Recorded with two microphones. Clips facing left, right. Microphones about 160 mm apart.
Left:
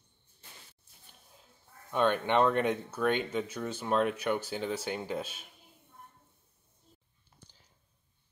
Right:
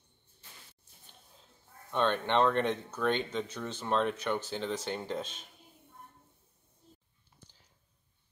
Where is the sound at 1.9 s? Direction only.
10° left (ahead or behind).